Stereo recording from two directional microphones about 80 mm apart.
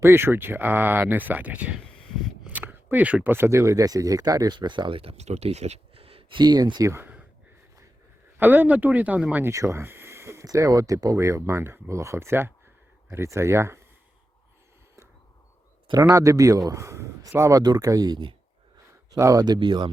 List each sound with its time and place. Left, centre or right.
0.0 s speech: right
2.5 s a sound: right
3.2 s speech: right
4.5 s speech: right
6.3 s speech: right
6.9 s a sound: right
8.4 s speech: right
9.4 s a sound: right
10.4 s speech: right
15.9 s speech: right
19.5 s speech: right